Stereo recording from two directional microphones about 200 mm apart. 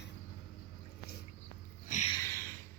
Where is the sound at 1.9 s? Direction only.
35° left (ahead or behind).